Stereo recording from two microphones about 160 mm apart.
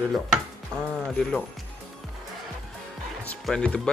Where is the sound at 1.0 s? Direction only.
5° left (ahead or behind).